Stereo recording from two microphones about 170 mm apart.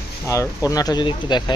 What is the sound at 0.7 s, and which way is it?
Speech, 25° left (ahead or behind).